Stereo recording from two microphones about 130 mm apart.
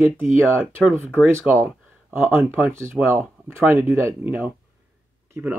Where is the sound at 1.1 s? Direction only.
15° right (ahead or behind).